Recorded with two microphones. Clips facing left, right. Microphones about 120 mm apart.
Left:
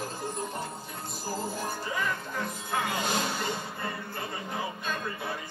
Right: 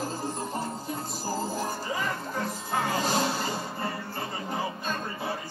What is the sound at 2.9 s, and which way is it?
Music, 35° right (ahead or behind).